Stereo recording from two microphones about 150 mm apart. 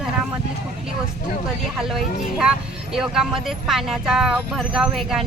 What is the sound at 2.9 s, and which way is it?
Speech, 5° right (ahead or behind).